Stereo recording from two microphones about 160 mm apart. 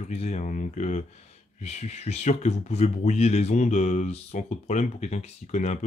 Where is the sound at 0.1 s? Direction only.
45° left (ahead or behind).